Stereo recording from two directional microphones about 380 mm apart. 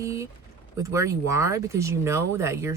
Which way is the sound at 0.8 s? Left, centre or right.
Centre.